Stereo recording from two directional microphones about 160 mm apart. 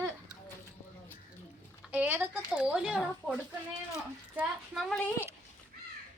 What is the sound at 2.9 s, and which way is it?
Speech, 10° left (ahead or behind).